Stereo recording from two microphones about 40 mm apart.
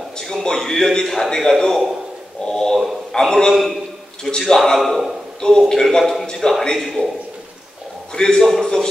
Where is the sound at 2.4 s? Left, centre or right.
Centre.